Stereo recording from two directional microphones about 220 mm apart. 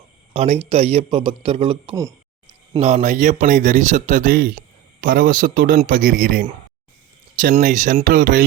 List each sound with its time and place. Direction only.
0.3 s a man's voice: 30° right (ahead or behind)
2.7 s speech: 30° right (ahead or behind)